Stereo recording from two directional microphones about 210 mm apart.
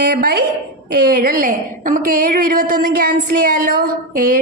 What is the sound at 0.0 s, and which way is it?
A woman's voice, 50° right (ahead or behind).